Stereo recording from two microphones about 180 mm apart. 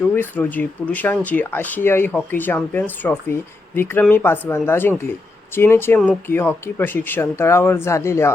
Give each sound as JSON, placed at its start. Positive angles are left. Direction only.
{"t": 0.2, "sound": "speech", "side_deg": 10}